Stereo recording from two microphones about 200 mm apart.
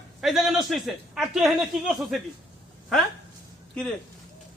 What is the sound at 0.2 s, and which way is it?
A man's voice, centre (ahead or behind).